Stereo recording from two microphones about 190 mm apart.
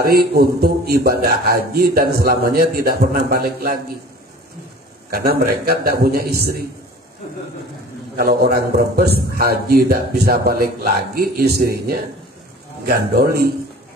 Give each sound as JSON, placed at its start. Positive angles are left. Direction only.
{"t": 0.0, "sound": "a man's voice", "side_deg": -55}
{"t": 5.1, "sound": "a man's voice", "side_deg": -55}
{"t": 8.2, "sound": "a man's voice", "side_deg": -50}